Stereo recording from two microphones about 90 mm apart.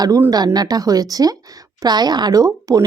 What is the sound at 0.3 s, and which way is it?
Speech, 50° right (ahead or behind).